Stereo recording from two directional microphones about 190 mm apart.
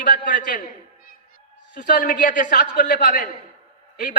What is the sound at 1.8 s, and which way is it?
A man's voice, 45° left (ahead or behind).